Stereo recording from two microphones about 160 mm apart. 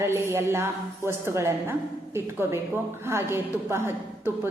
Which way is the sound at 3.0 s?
15° right (ahead or behind).